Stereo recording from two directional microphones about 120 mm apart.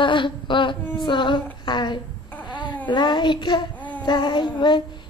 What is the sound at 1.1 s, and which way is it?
Female singing, 40° left (ahead or behind).